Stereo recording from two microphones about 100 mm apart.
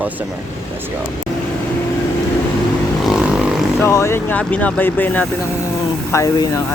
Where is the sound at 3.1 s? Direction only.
5° right (ahead or behind).